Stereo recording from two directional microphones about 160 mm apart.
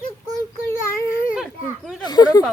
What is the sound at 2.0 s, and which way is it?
Speech, 25° left (ahead or behind).